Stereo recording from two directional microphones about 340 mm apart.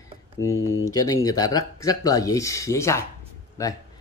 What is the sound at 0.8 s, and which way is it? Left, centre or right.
Speech, centre.